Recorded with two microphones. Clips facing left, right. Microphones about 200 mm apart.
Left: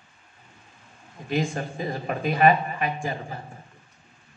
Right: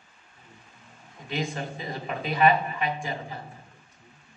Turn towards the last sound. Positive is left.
turn(degrees=45)  # may be behind; listen again after turning